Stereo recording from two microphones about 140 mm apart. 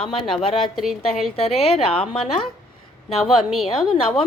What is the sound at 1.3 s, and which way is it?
Speech, 45° left (ahead or behind).